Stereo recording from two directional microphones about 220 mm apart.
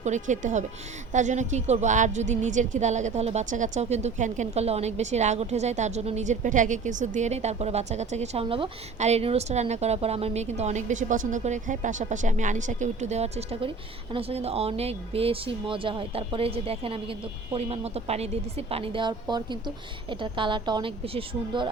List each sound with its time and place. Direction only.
0.0 s a woman's voice: 35° right (ahead or behind)